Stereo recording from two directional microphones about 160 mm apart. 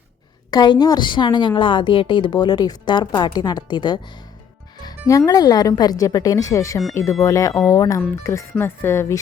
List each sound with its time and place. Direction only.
0.5 s a woman's voice: 25° left (ahead or behind)